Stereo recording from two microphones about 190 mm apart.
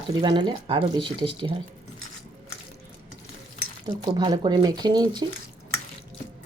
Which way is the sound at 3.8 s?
25° right (ahead or behind).